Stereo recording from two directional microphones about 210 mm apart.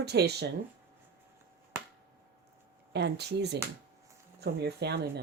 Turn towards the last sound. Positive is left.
turn(degrees=-50)  # may be behind; listen again after turning